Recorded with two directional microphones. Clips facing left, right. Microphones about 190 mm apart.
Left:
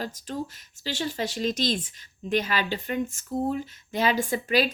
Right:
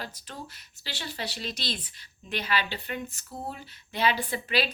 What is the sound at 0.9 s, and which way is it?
Speech, 45° left (ahead or behind).